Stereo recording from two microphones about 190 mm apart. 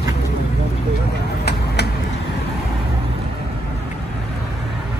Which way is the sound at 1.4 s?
60° left (ahead or behind).